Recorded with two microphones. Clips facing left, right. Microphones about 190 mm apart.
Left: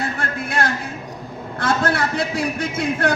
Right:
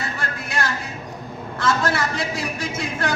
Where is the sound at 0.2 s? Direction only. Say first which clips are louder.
Left 4 dB; 55° left (ahead or behind).